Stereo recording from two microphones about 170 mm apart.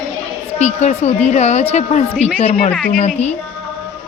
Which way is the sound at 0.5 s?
40° left (ahead or behind).